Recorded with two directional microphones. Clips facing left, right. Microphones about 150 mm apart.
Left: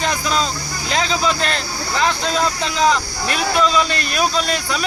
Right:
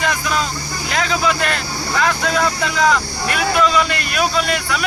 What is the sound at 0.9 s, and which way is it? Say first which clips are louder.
A man's voice: even; 30° left (ahead or behind).